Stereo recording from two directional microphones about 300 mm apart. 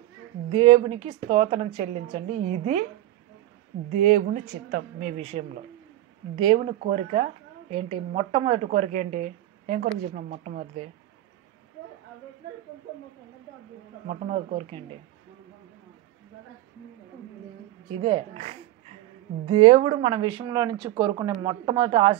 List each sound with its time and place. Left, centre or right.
0.5 s speech: centre
3.9 s speech: right
14.0 s speech: right
17.9 s speech: centre